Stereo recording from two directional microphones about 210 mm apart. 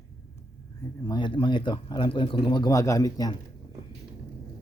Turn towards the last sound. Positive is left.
turn(degrees=15)  # may be behind; listen again after turning